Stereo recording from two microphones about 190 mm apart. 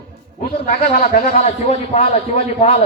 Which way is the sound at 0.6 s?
40° left (ahead or behind).